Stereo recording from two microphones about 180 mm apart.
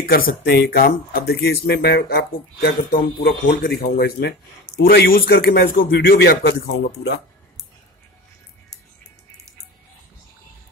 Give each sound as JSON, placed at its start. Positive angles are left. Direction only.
{"t": 0.0, "sound": "speech", "side_deg": 55}